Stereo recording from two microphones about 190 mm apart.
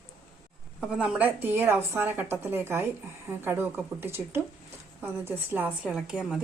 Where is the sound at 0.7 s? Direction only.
5° right (ahead or behind).